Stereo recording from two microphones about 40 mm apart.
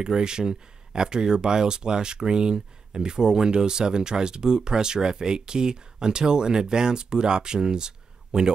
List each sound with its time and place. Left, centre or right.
0.0 s speech: centre